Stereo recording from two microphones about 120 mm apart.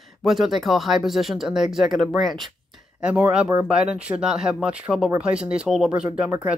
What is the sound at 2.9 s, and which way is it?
Speech, 10° right (ahead or behind).